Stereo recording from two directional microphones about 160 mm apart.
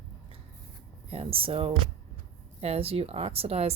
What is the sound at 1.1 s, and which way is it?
Speech, 35° right (ahead or behind).